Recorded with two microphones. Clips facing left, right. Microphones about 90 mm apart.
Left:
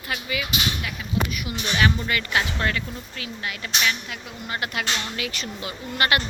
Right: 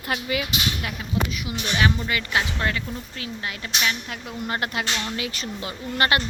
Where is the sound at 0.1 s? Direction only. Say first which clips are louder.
Right 3 dB; 45° right (ahead or behind).